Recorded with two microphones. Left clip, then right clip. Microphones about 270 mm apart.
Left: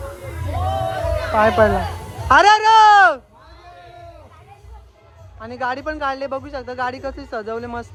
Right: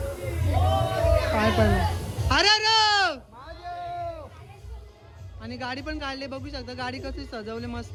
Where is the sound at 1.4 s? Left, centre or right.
Centre.